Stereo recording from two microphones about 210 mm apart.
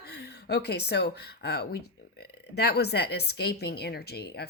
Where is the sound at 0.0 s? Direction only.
50° left (ahead or behind).